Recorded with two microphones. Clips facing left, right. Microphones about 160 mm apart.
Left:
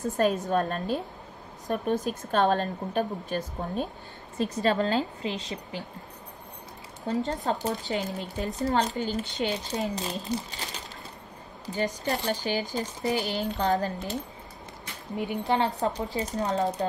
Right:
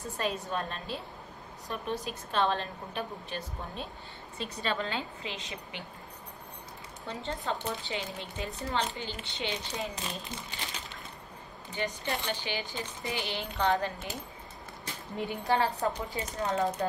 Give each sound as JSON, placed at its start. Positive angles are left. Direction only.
{"t": 0.0, "sound": "a woman's voice", "side_deg": 45}
{"t": 7.1, "sound": "speech", "side_deg": 40}
{"t": 11.6, "sound": "speech", "side_deg": 40}
{"t": 15.1, "sound": "speech", "side_deg": 20}
{"t": 16.2, "sound": "speech", "side_deg": 35}